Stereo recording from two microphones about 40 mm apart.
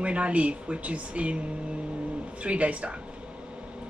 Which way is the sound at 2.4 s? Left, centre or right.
Right.